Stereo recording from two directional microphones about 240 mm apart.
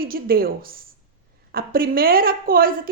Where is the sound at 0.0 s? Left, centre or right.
Right.